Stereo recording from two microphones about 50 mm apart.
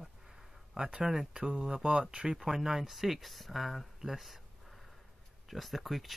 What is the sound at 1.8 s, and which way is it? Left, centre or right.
Speech, right.